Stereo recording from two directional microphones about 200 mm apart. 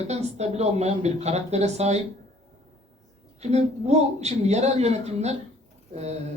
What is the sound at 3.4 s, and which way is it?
Speech, 35° right (ahead or behind).